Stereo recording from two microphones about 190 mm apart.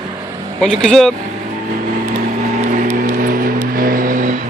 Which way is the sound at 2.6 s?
45° right (ahead or behind).